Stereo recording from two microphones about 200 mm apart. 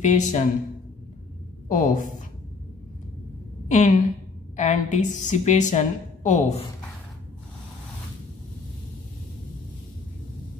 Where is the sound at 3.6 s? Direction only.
35° left (ahead or behind).